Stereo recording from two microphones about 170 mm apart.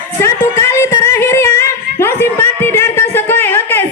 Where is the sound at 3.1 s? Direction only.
10° left (ahead or behind).